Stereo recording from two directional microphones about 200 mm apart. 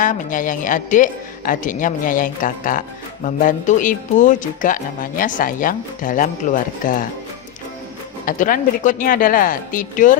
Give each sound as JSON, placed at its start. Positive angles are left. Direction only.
{"t": 0.0, "sound": "speech", "side_deg": 40}
{"t": 8.2, "sound": "a woman's voice", "side_deg": 45}